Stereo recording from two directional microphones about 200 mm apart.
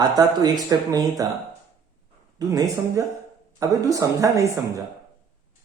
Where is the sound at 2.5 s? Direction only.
15° right (ahead or behind).